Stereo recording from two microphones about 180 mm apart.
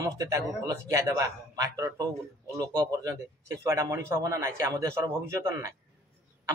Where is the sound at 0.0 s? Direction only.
20° right (ahead or behind).